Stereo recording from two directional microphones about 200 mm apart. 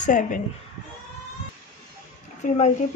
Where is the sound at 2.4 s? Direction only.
35° left (ahead or behind).